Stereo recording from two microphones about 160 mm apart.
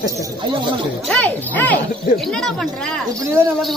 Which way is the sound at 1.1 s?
10° left (ahead or behind).